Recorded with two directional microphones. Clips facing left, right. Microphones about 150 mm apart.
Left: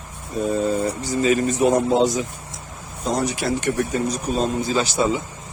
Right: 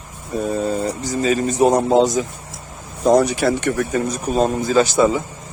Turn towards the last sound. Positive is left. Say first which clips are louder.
# right 6 dB
turn(degrees=-50)  # may be behind; listen again after turning